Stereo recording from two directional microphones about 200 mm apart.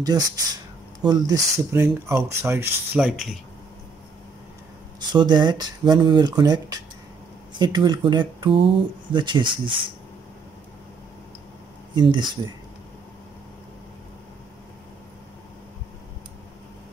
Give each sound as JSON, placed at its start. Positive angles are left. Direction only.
{"t": 0.1, "sound": "speech", "side_deg": -20}
{"t": 5.1, "sound": "speech", "side_deg": -20}
{"t": 11.9, "sound": "speech", "side_deg": -25}